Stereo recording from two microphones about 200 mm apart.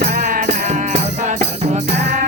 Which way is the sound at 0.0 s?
40° right (ahead or behind).